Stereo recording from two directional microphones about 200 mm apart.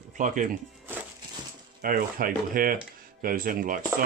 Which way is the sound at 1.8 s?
45° right (ahead or behind).